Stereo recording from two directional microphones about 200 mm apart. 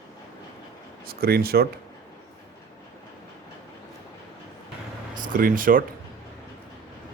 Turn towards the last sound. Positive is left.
turn(degrees=-45)  # may be behind; listen again after turning